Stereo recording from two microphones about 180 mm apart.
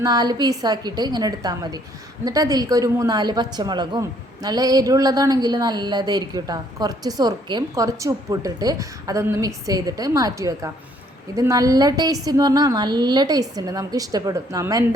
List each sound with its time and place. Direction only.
0.0 s a woman's voice: 20° right (ahead or behind)